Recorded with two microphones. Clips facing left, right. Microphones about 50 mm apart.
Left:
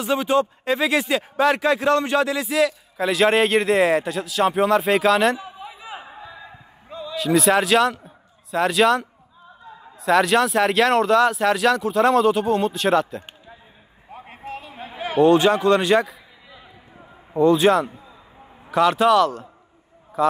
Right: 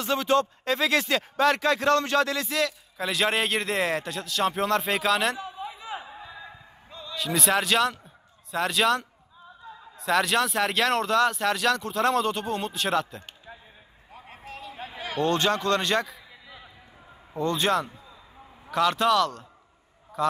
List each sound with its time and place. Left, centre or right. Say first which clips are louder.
0.0 s speech: left 4 dB; centre
6.9 s a sound: left 8 dB; centre
7.2 s a man's voice: left 7 dB; centre
14.1 s a sound: left 8 dB; left
15.1 s speech: left 9 dB; centre
17.3 s speech: left 9 dB; centre